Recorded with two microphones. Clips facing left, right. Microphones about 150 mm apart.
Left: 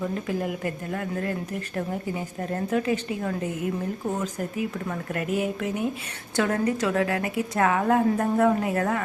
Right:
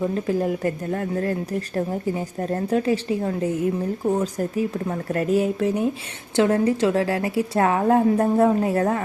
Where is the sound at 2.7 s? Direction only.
35° right (ahead or behind).